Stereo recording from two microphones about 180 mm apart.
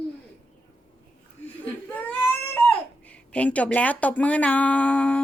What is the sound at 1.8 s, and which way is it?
Baby cry, 10° left (ahead or behind).